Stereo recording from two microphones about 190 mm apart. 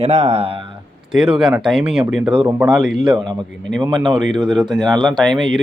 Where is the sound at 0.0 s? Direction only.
35° right (ahead or behind).